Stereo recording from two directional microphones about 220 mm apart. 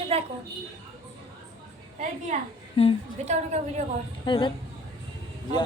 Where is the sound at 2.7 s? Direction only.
25° left (ahead or behind).